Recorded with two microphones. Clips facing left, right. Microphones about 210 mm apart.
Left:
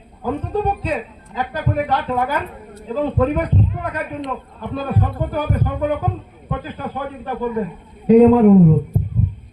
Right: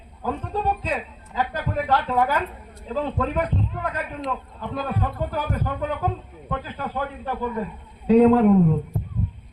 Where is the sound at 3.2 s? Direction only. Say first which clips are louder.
Left 6 dB; 15° left (ahead or behind).